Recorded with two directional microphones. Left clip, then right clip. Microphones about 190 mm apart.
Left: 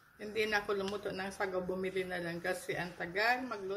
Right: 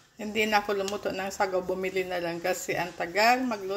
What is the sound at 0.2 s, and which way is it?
Speech, 25° right (ahead or behind).